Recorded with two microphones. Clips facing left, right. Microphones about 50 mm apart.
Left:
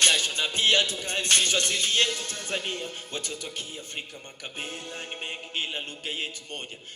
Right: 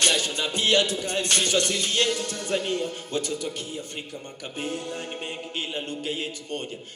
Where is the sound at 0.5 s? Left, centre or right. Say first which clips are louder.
Right 2 dB; left.